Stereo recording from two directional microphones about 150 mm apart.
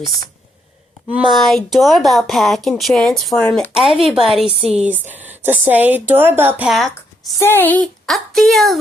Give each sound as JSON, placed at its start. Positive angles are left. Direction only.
{"t": 1.1, "sound": "speech", "side_deg": 0}
{"t": 3.8, "sound": "speech", "side_deg": 0}
{"t": 6.7, "sound": "speech", "side_deg": 0}
{"t": 7.3, "sound": "speech", "side_deg": 15}